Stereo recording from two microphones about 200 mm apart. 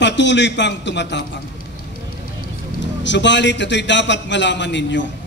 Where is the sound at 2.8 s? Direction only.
65° left (ahead or behind).